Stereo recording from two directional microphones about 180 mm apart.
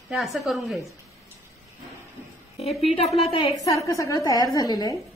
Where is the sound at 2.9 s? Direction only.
35° left (ahead or behind).